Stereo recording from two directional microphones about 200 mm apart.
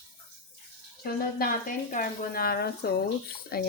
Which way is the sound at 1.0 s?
45° left (ahead or behind).